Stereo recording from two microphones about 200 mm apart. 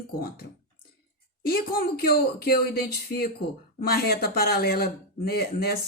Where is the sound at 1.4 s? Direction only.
50° left (ahead or behind).